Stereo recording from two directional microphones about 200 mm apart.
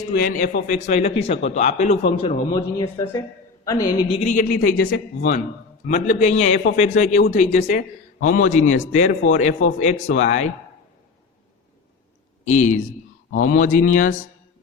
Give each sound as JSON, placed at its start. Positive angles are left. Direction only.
{"t": 0.1, "sound": "a man's voice", "side_deg": 45}
{"t": 2.5, "sound": "a woman's voice", "side_deg": 15}
{"t": 4.2, "sound": "a man's voice", "side_deg": 40}
{"t": 12.5, "sound": "a man's voice", "side_deg": 40}